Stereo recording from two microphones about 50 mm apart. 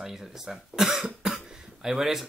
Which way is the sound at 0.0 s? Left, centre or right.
Centre.